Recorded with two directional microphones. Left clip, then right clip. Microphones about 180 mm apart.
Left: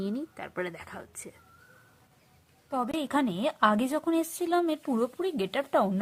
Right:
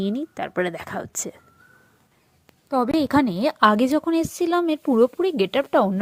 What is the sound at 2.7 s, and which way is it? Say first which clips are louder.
A woman's voice: right 9 dB; 30° right (ahead or behind).